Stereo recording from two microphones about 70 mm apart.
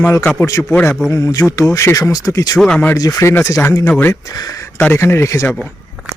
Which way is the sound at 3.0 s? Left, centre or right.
Left.